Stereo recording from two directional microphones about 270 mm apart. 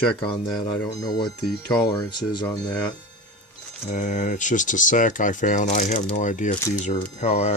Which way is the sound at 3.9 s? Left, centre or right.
Left.